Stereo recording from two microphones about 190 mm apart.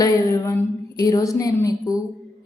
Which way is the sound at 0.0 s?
15° left (ahead or behind).